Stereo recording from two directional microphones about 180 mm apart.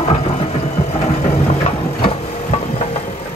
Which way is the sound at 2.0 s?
35° left (ahead or behind).